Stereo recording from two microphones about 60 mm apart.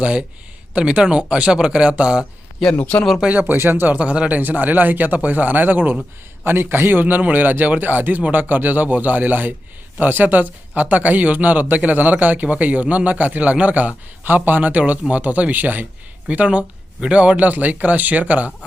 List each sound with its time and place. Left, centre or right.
0.0 s speech: centre
2.7 s speech: left
3.2 s a man's voice: right
3.9 s a man's voice: right